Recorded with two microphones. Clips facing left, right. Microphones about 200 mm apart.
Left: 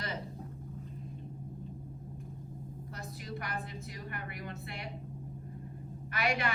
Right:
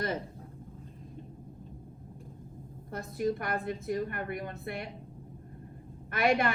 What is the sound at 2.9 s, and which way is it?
A woman's voice, 50° right (ahead or behind).